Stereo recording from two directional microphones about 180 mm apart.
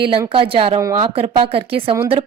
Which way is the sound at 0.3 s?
30° right (ahead or behind).